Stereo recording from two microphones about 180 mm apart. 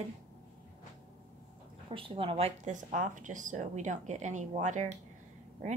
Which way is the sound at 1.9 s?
30° right (ahead or behind).